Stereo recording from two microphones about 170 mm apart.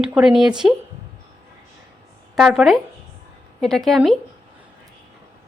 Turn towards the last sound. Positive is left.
turn(degrees=0)  # may be behind; listen again after turning